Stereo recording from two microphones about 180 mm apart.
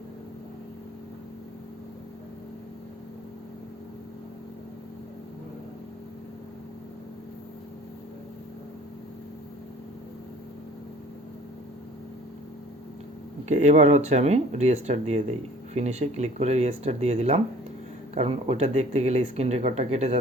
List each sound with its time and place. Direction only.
13.5 s speech: 40° right (ahead or behind)